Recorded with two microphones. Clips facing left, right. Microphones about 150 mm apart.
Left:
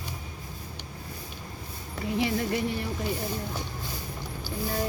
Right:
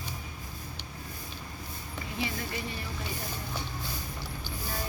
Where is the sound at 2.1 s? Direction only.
80° left.